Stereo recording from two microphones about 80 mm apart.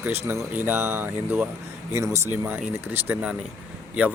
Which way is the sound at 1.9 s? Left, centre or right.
Right.